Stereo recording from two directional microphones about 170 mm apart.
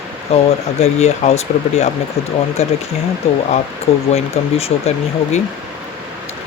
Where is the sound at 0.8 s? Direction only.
40° left (ahead or behind).